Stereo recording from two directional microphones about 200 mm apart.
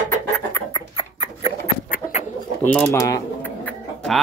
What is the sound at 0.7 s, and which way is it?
Chicken, 25° left (ahead or behind).